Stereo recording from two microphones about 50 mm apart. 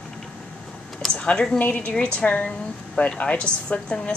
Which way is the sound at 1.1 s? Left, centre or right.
Left.